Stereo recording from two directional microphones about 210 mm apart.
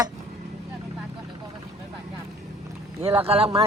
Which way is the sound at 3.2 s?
30° right (ahead or behind).